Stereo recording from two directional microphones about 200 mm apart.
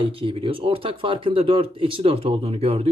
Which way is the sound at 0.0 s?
25° right (ahead or behind).